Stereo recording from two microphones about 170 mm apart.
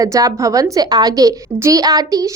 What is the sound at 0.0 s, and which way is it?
A woman's voice, 20° right (ahead or behind).